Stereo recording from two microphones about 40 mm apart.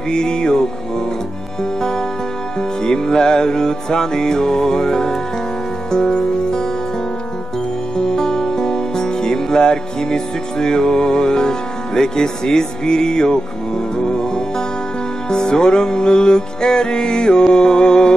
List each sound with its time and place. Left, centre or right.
0.1 s music: centre
8.0 s music: centre